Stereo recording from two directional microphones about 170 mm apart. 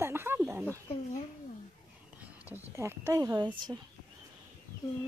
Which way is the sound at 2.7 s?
15° right (ahead or behind).